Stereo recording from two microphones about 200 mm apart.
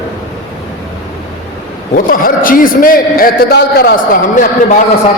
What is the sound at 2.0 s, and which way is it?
A man's voice, 45° left (ahead or behind).